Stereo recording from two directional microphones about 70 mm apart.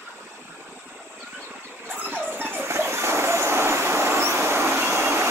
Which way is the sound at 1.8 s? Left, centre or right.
Right.